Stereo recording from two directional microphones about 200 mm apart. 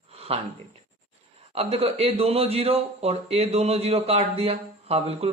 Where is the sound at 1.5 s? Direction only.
30° right (ahead or behind).